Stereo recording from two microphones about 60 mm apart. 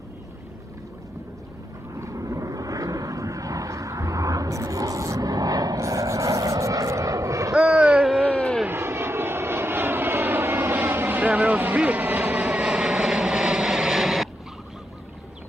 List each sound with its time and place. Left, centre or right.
2.0 s vehicle: right
7.5 s wail: centre
8.2 s a sound: left
8.6 s vehicle: right; by 14.3 s centre